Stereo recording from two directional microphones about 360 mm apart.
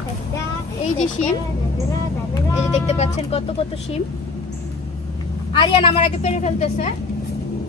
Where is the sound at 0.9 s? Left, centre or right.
Centre.